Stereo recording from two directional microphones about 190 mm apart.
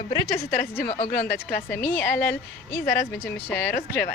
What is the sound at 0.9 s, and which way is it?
Speech, 50° left (ahead or behind).